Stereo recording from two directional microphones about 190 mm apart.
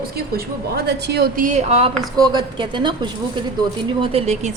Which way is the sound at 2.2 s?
25° right (ahead or behind).